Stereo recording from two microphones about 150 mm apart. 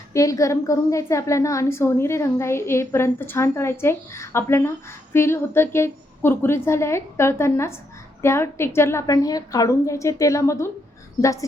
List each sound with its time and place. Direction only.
0.1 s a woman's voice: 20° left (ahead or behind)